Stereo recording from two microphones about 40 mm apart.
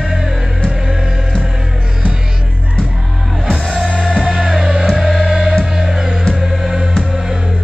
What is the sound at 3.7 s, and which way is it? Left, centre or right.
Music, right.